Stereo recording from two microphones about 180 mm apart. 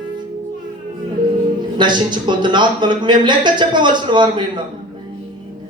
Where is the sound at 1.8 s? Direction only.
25° right (ahead or behind).